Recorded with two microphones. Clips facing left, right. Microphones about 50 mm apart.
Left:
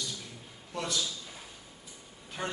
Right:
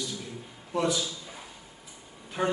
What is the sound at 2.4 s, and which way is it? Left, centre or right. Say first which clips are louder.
Speech: right 8 dB; centre.